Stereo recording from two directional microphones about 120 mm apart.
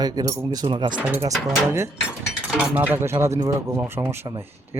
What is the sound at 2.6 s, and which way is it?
Speech, 15° right (ahead or behind).